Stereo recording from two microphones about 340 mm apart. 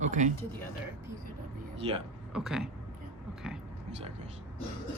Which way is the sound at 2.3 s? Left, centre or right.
Centre.